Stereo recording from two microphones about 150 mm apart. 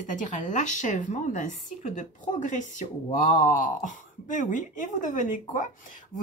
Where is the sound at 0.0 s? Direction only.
55° left (ahead or behind).